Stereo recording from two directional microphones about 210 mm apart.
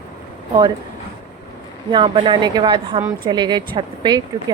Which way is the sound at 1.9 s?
20° right (ahead or behind).